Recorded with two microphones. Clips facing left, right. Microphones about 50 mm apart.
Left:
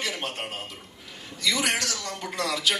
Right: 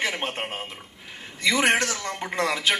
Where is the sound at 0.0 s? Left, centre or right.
Right.